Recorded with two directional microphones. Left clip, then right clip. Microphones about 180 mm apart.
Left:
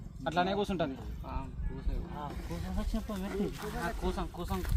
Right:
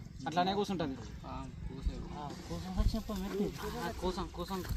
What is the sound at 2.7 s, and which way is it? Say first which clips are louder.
Speech: left 1 dB; 15° right (ahead or behind).